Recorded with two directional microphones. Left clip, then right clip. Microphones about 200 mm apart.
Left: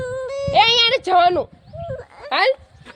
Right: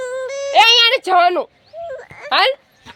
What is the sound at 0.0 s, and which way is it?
Music, 20° left (ahead or behind).